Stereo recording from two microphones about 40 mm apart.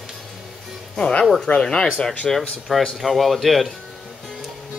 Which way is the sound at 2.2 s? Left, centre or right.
Centre.